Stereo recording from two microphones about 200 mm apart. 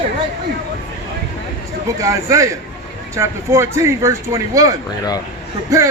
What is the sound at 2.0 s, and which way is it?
A man's voice, 15° right (ahead or behind).